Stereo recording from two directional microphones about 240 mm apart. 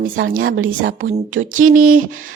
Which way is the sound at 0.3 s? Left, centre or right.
Right.